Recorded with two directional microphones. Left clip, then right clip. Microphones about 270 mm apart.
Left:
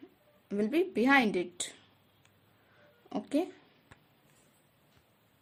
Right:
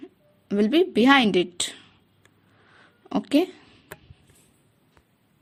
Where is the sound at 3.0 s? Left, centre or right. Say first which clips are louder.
Right 10 dB; centre.